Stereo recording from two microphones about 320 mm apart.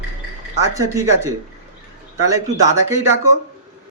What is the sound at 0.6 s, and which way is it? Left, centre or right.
Speech, centre.